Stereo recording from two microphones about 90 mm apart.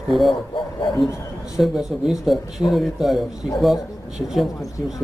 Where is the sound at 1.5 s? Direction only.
5° right (ahead or behind).